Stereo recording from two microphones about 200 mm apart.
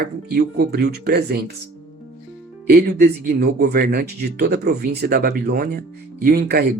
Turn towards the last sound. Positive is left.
turn(degrees=-50)  # may be behind; listen again after turning